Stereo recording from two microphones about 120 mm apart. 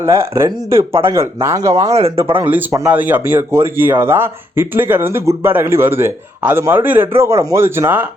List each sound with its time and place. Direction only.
0.0 s speech: 25° right (ahead or behind)
2.4 s speech: 15° right (ahead or behind)